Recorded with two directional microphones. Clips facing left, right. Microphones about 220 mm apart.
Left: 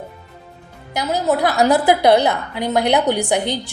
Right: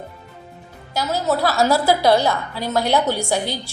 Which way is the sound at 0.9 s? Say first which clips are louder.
Left 2 dB; 15° left (ahead or behind).